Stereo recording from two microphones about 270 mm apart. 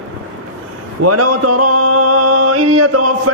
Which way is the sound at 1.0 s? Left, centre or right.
Right.